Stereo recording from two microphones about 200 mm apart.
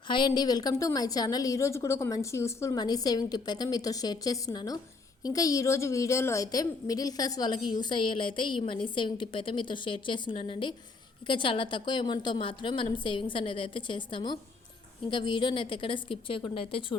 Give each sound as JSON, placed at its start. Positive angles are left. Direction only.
{"t": 0.1, "sound": "a woman's voice", "side_deg": 20}